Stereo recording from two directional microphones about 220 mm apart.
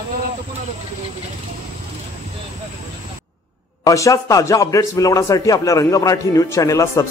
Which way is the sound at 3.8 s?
15° left (ahead or behind).